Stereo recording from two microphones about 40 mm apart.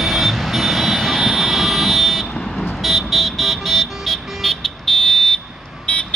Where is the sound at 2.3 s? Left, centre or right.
Centre.